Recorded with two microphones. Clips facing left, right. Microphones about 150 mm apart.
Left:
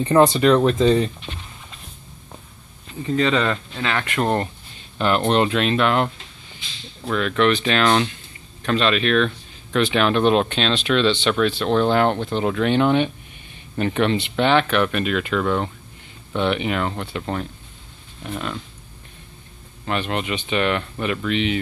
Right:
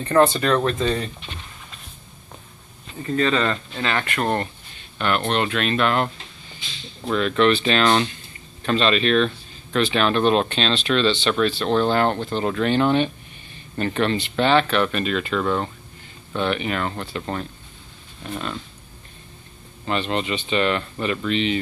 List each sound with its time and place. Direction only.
0.0 s speech: 15° left (ahead or behind)
3.0 s speech: 15° left (ahead or behind)
4.0 s speech: 15° left (ahead or behind)
4.9 s speech: 30° left (ahead or behind)
7.2 s speech: 10° left (ahead or behind)
19.9 s speech: 10° left (ahead or behind)